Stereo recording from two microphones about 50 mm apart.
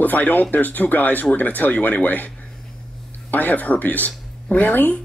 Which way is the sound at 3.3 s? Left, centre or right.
Left.